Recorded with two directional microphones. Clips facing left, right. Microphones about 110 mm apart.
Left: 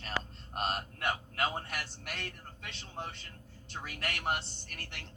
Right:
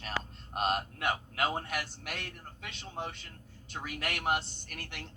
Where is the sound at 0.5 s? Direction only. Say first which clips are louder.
Right 4 dB; 5° right (ahead or behind).